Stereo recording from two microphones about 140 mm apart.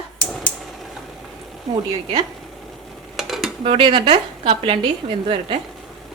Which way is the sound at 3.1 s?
Centre (ahead or behind).